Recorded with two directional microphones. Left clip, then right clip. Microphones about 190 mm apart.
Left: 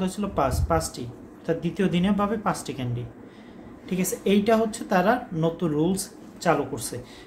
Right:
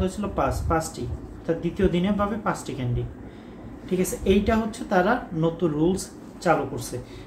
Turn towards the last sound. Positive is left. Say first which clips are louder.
# right 1 dB
turn(degrees=35)  # may be behind; listen again after turning